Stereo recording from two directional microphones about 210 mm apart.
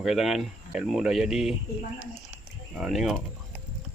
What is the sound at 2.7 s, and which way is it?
Speech, centre (ahead or behind).